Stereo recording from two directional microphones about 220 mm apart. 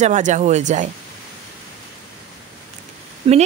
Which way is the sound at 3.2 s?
25° right (ahead or behind).